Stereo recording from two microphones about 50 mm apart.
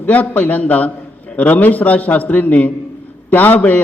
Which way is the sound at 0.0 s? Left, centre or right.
Left.